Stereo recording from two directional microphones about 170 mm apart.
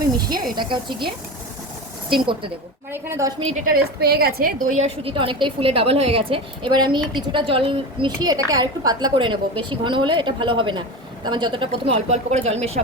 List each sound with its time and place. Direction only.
0.5 s a woman's voice: 25° right (ahead or behind)
2.9 s a woman's voice: 15° right (ahead or behind)
3.4 s a woman's voice: 45° right (ahead or behind)
4.0 s a woman's voice: 65° right (ahead or behind)
4.8 s a woman's voice: 30° right (ahead or behind)